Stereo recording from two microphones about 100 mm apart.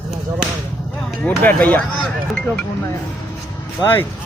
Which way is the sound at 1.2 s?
15° left (ahead or behind).